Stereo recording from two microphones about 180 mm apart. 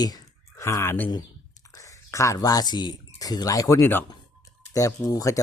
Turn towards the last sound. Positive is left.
turn(degrees=20)  # may be behind; listen again after turning